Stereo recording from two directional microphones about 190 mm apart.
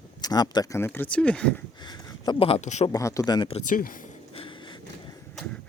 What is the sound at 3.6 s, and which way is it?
Speech, 45° left (ahead or behind).